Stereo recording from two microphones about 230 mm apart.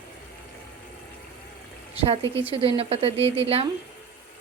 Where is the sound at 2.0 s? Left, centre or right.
Right.